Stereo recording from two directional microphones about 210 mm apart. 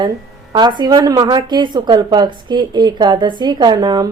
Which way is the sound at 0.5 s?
20° right (ahead or behind).